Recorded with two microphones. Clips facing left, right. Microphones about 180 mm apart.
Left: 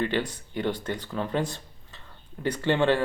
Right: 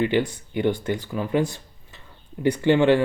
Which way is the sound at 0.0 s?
15° right (ahead or behind).